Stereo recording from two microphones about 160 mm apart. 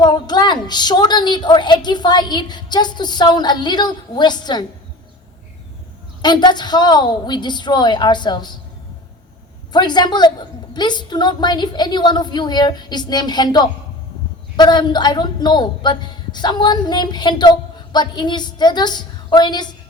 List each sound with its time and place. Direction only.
0.0 s a woman's voice: 25° left (ahead or behind)
6.2 s a woman's voice: 25° left (ahead or behind)
9.7 s a woman's voice: 25° left (ahead or behind)